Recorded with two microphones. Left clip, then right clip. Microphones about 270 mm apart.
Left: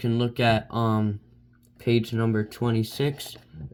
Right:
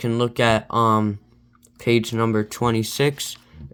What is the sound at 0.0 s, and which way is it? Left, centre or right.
Speech, right.